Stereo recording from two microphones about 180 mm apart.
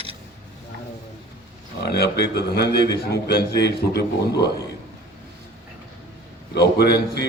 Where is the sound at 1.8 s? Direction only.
65° left (ahead or behind).